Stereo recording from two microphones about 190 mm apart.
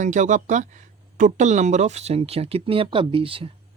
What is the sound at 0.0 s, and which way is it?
Speech, 40° right (ahead or behind).